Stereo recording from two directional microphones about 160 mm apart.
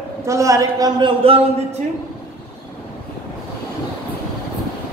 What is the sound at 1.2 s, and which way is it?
Speech, 35° right (ahead or behind).